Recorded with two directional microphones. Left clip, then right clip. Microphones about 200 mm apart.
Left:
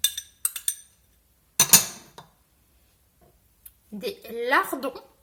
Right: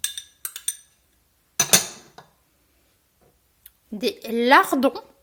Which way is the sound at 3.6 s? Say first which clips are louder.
Right 7 dB; 45° right (ahead or behind).